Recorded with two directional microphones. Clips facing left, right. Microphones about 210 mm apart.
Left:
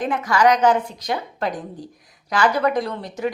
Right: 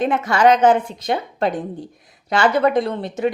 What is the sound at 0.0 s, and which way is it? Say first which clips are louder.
A woman's voice: right 3 dB; 25° right (ahead or behind).